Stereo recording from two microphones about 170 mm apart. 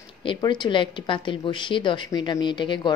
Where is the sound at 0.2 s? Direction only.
30° left (ahead or behind).